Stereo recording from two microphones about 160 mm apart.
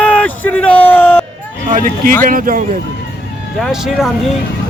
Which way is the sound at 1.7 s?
55° right (ahead or behind).